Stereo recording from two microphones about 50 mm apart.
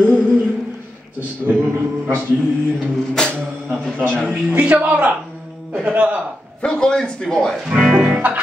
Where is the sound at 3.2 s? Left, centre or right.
Centre.